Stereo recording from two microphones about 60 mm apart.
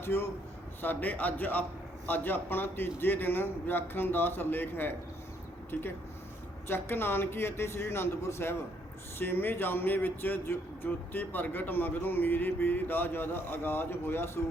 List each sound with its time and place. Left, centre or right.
0.0 s speech: left
0.8 s a man's voice: left